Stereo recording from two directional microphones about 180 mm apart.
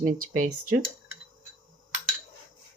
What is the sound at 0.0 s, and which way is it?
Speech, 50° right (ahead or behind).